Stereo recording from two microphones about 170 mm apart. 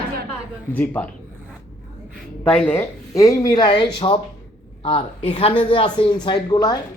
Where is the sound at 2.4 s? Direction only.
5° left (ahead or behind).